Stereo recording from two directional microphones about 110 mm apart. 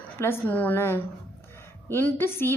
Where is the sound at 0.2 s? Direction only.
20° left (ahead or behind).